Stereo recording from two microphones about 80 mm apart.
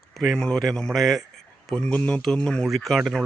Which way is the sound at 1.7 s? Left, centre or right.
Centre.